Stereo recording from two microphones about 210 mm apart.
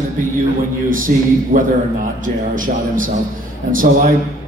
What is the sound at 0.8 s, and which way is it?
A man's voice, 40° right (ahead or behind).